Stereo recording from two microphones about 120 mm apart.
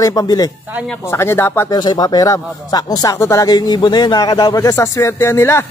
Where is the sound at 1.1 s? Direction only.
20° left (ahead or behind).